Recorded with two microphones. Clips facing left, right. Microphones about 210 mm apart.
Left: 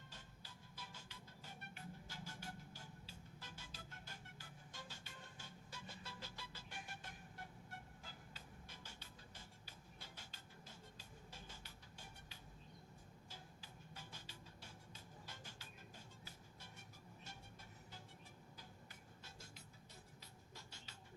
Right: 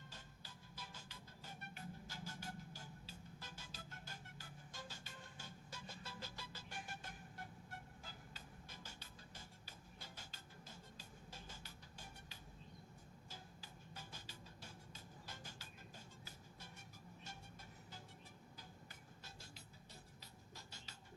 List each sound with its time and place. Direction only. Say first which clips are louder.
0.4 s music: right 1 dB; 40° right (ahead or behind)
13.9 s music: right 2 dB; 45° right (ahead or behind)
19.2 s music: even; 35° right (ahead or behind)